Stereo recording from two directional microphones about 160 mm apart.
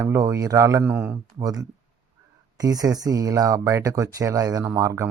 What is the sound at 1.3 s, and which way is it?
A man's voice, 25° right (ahead or behind).